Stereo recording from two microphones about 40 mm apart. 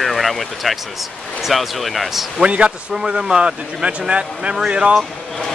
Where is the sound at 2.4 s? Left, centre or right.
Right.